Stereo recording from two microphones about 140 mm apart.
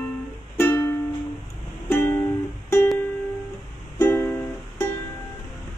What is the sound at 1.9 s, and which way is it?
Music, 15° left (ahead or behind).